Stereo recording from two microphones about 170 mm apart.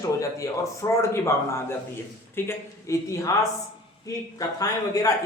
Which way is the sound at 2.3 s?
15° left (ahead or behind).